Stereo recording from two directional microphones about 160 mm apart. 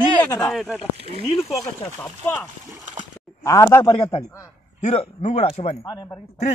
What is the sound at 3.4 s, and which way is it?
Speech, 20° left (ahead or behind).